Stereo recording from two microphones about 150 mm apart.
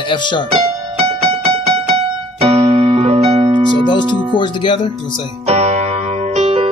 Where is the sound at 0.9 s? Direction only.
40° right (ahead or behind).